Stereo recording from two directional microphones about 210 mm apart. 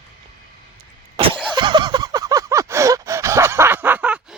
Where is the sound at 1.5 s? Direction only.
20° right (ahead or behind).